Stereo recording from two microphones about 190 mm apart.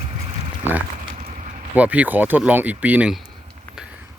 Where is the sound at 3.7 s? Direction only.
5° right (ahead or behind).